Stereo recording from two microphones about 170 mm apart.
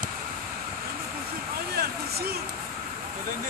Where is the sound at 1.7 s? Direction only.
65° right (ahead or behind).